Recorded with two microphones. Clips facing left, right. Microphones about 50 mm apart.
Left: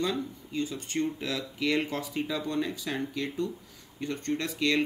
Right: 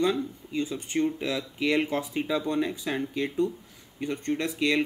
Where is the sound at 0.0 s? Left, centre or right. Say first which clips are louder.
Right 5 dB; right.